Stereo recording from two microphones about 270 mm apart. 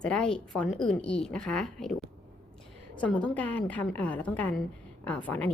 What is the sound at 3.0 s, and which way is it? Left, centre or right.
A woman's voice, centre.